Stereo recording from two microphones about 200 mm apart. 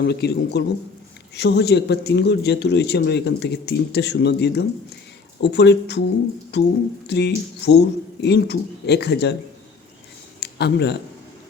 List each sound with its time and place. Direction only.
0.0 s speech: 55° left (ahead or behind)
10.4 s speech: 55° left (ahead or behind)